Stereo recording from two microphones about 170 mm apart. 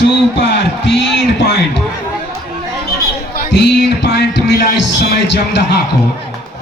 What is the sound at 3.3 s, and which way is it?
A man's voice, 85° left.